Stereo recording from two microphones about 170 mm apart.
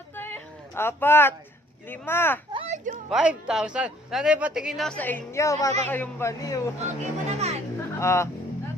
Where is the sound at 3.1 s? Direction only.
5° right (ahead or behind); by 6.6 s 15° left (ahead or behind).